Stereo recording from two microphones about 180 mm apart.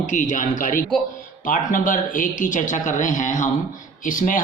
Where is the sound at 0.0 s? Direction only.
45° left (ahead or behind).